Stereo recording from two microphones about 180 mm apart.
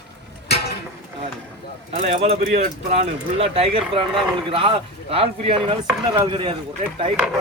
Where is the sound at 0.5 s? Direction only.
65° left (ahead or behind).